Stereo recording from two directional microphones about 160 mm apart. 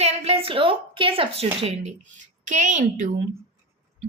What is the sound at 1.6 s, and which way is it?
A woman's voice, 45° right (ahead or behind).